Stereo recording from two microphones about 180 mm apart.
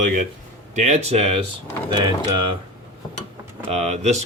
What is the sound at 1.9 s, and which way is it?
Speech, 25° right (ahead or behind).